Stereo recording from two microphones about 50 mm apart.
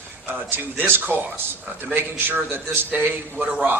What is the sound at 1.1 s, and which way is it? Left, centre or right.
A man's voice, right.